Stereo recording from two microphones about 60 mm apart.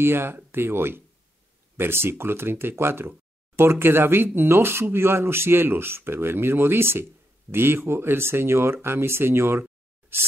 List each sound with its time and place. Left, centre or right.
0.0 s speech: right